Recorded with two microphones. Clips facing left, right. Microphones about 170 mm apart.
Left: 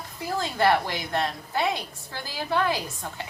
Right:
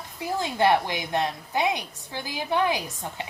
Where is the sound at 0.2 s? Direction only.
15° right (ahead or behind).